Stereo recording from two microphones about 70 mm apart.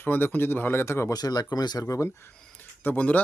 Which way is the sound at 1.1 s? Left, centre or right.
Left.